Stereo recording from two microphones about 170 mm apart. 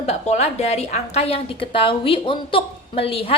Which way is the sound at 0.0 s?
40° left (ahead or behind).